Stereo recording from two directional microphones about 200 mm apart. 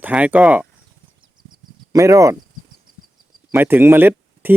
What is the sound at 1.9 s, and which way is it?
Speech, 15° right (ahead or behind).